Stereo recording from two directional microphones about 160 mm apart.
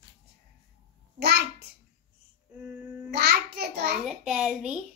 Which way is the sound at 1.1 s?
90° right.